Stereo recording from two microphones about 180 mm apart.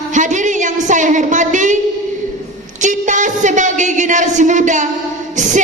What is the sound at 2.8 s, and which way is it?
A woman's voice, 45° right (ahead or behind).